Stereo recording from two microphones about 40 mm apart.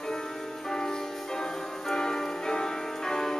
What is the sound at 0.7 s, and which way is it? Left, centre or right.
Music, centre.